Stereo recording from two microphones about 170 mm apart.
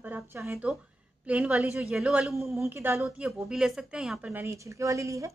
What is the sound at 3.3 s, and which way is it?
A woman's voice, centre (ahead or behind).